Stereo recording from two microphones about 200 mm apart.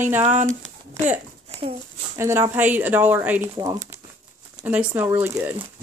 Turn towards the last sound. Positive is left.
turn(degrees=-10)  # may be behind; listen again after turning